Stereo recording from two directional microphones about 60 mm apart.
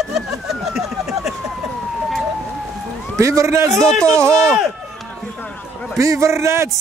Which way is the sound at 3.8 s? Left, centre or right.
Centre.